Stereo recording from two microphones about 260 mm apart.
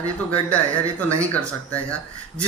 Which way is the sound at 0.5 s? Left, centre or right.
Centre.